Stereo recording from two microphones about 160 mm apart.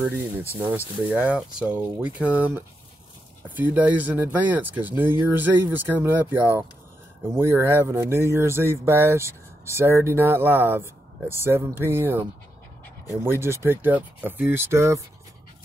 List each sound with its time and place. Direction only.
0.6 s speech: 10° right (ahead or behind)